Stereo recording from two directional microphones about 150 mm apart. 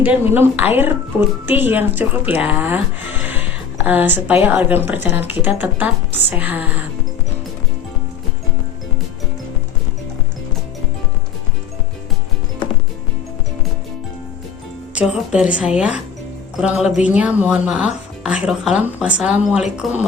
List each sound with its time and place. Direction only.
0.0 s speech: 15° right (ahead or behind)
14.9 s speech: 5° right (ahead or behind)